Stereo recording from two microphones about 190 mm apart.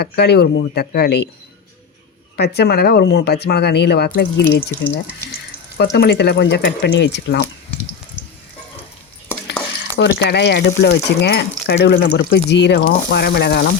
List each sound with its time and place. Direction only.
0.0 s speech: 60° left (ahead or behind)
2.3 s speech: 60° left (ahead or behind)
10.0 s speech: 65° left (ahead or behind)